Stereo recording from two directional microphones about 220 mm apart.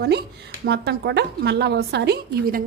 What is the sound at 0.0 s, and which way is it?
A woman's voice, 50° right (ahead or behind).